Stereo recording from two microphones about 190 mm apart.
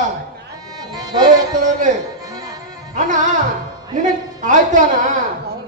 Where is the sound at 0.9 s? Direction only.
20° right (ahead or behind).